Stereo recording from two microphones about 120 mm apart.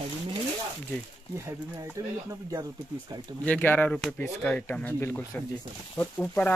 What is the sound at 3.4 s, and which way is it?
Speech, 15° left (ahead or behind).